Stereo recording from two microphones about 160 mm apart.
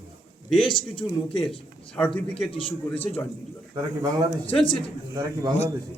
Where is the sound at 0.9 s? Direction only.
35° left (ahead or behind).